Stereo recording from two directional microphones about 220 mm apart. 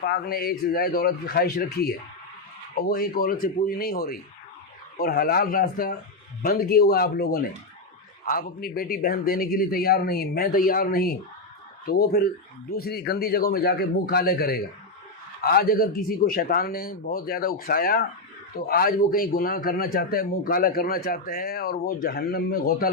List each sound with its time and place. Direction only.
0.0 s speech: 45° left (ahead or behind)